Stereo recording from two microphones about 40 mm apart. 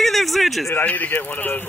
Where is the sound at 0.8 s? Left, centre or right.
Left.